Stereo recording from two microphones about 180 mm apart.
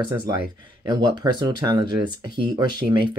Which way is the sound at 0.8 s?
25° right (ahead or behind).